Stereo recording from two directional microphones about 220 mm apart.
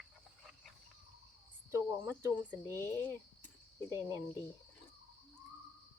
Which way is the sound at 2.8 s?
10° left (ahead or behind).